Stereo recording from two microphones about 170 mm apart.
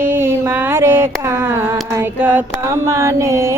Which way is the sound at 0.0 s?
15° right (ahead or behind).